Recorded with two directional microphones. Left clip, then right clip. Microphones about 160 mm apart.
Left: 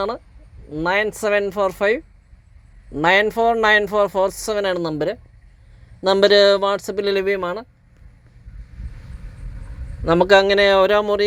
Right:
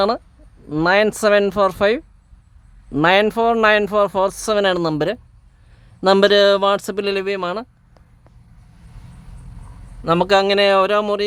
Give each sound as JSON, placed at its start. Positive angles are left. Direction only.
{"t": 0.9, "sound": "speech", "side_deg": -25}
{"t": 6.0, "sound": "speech", "side_deg": -15}
{"t": 10.0, "sound": "speech", "side_deg": -5}